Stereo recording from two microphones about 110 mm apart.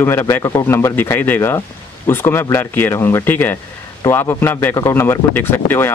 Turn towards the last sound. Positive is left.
turn(degrees=20)  # may be behind; listen again after turning